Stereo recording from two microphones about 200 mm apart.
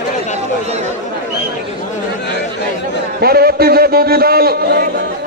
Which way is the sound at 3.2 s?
50° right (ahead or behind).